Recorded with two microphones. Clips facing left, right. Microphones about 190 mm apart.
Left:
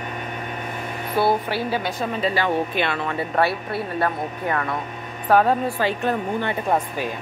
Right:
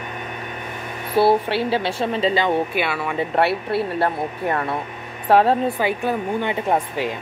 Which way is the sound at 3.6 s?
30° right (ahead or behind).